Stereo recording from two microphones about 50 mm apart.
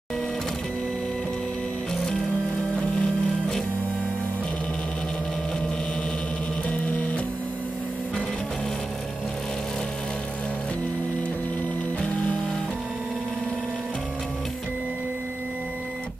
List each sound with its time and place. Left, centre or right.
2.7 s music: centre
6.7 s music: left
12.0 s music: left